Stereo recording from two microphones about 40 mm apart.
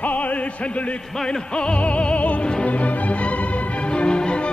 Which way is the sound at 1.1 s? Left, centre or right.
Centre.